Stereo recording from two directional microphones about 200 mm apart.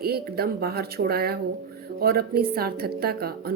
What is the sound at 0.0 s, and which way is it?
A woman's voice, 50° right (ahead or behind).